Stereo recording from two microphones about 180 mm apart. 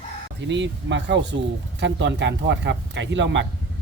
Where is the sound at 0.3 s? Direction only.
80° right.